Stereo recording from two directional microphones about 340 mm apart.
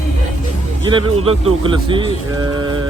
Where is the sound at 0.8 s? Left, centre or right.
Centre.